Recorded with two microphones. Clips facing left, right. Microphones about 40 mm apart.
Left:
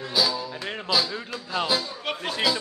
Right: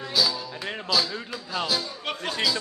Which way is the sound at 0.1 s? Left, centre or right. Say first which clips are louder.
Left 1 dB; centre.